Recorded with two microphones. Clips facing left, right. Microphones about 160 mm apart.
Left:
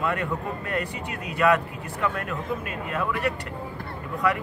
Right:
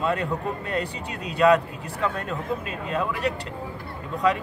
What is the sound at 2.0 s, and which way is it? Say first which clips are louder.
Speech: right 1 dB; 25° right (ahead or behind).